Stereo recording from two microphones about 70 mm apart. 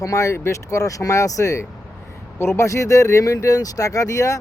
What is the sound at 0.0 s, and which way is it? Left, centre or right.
Speech, left.